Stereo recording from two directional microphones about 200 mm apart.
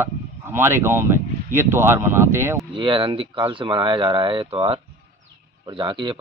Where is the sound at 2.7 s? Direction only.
25° right (ahead or behind).